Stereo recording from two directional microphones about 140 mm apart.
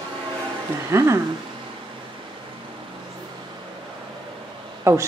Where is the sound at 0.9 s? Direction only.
20° right (ahead or behind).